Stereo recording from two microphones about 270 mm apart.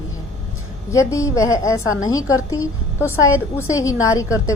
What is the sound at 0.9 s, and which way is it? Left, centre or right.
A woman's voice, centre.